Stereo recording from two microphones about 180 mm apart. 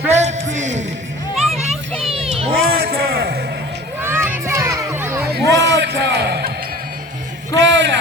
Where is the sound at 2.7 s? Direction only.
60° right (ahead or behind).